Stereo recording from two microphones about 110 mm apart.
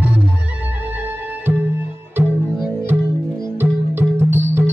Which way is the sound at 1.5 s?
15° right (ahead or behind).